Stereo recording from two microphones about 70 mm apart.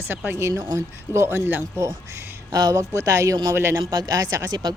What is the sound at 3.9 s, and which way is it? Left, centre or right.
Speech, right.